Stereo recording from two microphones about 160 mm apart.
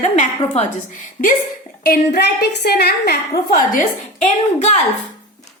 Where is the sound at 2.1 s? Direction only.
90° left.